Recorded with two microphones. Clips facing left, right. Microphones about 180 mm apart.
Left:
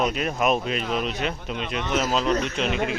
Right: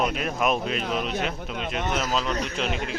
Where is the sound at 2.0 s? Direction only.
Centre (ahead or behind).